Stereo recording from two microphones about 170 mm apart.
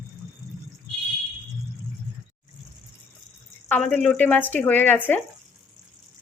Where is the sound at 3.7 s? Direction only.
5° left (ahead or behind).